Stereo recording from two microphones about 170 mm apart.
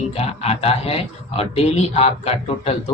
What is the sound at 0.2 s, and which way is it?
Speech, 35° left (ahead or behind).